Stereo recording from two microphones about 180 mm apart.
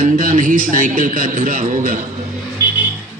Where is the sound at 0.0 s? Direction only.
45° right (ahead or behind).